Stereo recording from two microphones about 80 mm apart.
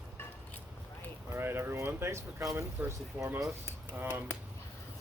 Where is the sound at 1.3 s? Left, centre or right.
Right.